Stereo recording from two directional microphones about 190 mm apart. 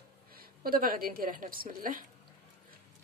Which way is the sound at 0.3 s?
50° right (ahead or behind).